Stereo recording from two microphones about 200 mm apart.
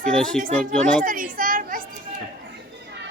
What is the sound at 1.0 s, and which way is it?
Children playing, 45° right (ahead or behind).